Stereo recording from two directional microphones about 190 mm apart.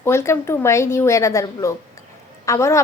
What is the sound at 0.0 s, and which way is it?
A woman's voice, 15° left (ahead or behind).